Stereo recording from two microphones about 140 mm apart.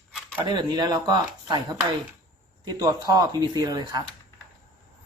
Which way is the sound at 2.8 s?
25° right (ahead or behind).